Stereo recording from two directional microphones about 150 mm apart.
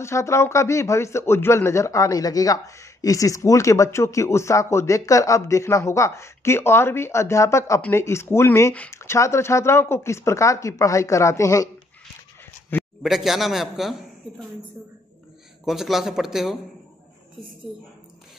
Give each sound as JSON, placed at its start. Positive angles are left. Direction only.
{"t": 0.0, "sound": "speech", "side_deg": 20}
{"t": 13.0, "sound": "a man's voice", "side_deg": 0}
{"t": 15.6, "sound": "a man's voice", "side_deg": 0}